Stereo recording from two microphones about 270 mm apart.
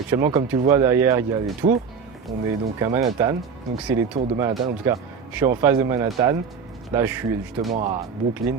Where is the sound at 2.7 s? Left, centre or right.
Centre.